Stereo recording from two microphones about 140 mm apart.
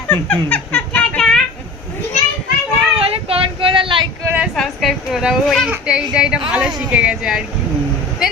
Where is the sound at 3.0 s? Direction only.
45° right (ahead or behind).